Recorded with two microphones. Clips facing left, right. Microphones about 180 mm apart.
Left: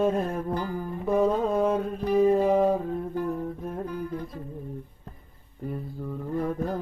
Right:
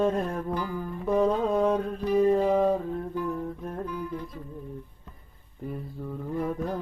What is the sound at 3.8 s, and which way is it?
Music, 45° left (ahead or behind).